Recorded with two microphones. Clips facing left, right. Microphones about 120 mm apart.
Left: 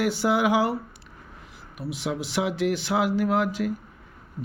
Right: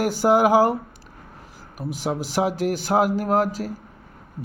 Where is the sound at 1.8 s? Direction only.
40° right (ahead or behind).